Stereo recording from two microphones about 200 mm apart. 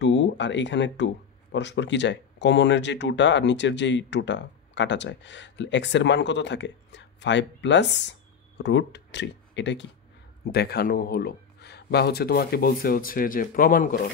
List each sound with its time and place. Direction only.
0.0 s speech: 65° left (ahead or behind); by 14.1 s 45° left (ahead or behind)